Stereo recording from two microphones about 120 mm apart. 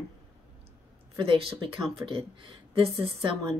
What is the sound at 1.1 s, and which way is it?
Speech, 45° right (ahead or behind).